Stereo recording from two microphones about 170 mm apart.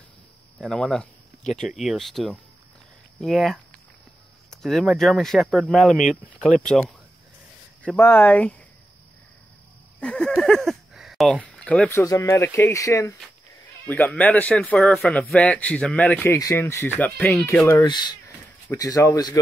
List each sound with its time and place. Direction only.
0.6 s speech: centre (ahead or behind)
6.5 s speech: 50° left (ahead or behind)
7.8 s a man's voice: 15° left (ahead or behind)
9.9 s a sound: 5° left (ahead or behind)
12.0 s a man's voice: 20° left (ahead or behind)